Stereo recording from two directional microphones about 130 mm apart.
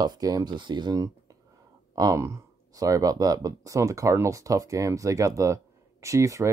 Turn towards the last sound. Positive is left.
turn(degrees=-25)  # may be behind; listen again after turning